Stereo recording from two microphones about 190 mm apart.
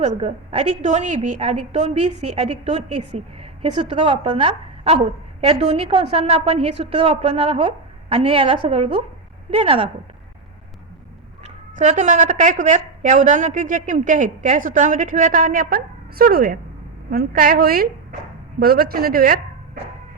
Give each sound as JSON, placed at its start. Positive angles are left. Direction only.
{"t": 0.0, "sound": "a woman's voice", "side_deg": -35}
{"t": 11.8, "sound": "a woman's voice", "side_deg": -40}